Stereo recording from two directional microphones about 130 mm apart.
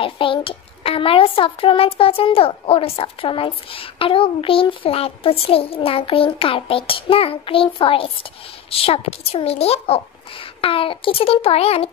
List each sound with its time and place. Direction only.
0.0 s a child's voice: 45° left (ahead or behind)